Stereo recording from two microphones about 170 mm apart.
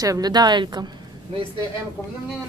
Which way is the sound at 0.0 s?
20° right (ahead or behind).